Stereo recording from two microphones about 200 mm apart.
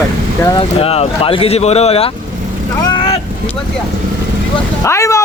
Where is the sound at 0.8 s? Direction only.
30° left (ahead or behind).